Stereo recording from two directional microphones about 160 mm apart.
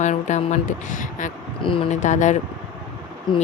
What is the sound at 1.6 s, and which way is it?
Speech, 30° left (ahead or behind).